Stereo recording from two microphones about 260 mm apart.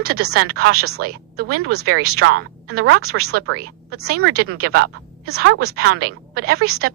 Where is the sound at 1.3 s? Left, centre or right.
Right.